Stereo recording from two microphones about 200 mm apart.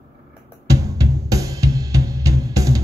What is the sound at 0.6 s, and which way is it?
Drum kit, 15° right (ahead or behind).